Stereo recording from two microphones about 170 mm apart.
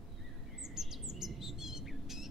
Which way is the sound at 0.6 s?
Centre (ahead or behind).